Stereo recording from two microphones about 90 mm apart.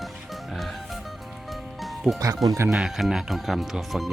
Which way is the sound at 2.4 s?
30° right (ahead or behind).